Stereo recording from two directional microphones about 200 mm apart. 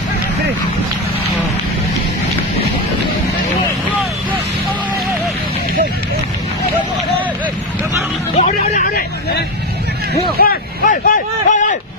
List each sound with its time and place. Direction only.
8.4 s hubbub: 40° left (ahead or behind)
10.4 s vehicle: 45° left (ahead or behind)